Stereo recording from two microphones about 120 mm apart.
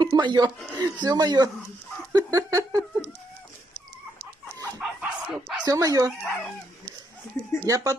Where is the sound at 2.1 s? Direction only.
30° right (ahead or behind).